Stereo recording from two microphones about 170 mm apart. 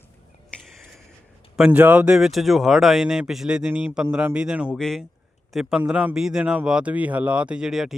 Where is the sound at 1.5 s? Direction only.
5° right (ahead or behind).